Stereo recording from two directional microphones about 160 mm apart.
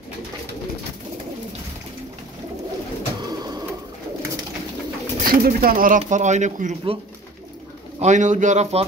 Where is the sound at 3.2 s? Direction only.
25° right (ahead or behind).